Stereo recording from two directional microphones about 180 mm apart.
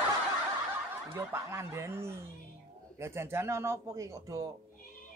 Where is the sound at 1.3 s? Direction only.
15° right (ahead or behind).